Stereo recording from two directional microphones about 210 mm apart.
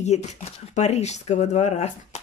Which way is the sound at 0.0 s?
30° left (ahead or behind).